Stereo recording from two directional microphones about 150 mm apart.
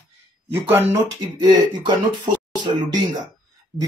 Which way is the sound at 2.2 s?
30° right (ahead or behind).